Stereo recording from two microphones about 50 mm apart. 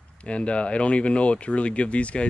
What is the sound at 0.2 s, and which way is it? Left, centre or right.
Speech, left.